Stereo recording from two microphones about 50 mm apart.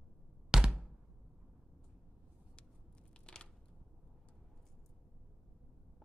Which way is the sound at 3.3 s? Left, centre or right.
Centre.